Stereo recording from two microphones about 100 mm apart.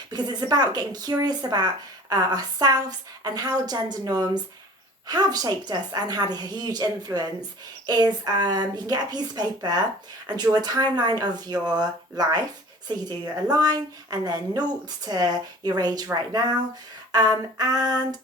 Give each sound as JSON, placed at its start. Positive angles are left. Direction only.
{"t": 0.1, "sound": "a woman's voice", "side_deg": -45}
{"t": 17.1, "sound": "a sound", "side_deg": -40}
{"t": 17.6, "sound": "a woman's voice", "side_deg": -40}